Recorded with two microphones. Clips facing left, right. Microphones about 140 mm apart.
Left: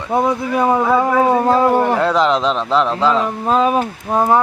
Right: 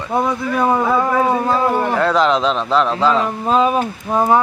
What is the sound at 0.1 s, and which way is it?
A man's voice, 20° left (ahead or behind).